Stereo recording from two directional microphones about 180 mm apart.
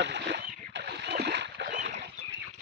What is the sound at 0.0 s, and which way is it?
Splash, 70° right (ahead or behind).